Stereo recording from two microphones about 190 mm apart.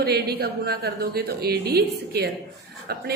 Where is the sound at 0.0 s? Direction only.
55° right (ahead or behind).